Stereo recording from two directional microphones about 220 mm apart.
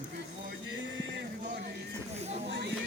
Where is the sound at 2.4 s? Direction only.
55° right (ahead or behind).